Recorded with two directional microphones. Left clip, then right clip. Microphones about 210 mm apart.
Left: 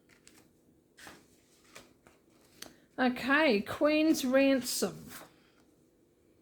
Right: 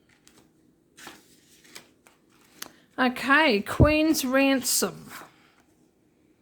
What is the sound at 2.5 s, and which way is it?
Speech, 20° right (ahead or behind).